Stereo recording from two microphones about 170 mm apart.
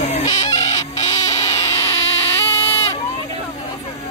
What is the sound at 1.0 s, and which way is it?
Frog, 40° left (ahead or behind).